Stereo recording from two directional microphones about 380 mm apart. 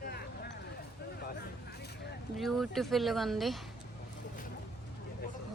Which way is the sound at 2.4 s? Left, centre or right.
Centre.